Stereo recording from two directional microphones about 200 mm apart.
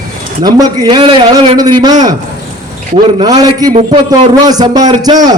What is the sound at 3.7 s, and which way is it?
Speech, 35° right (ahead or behind).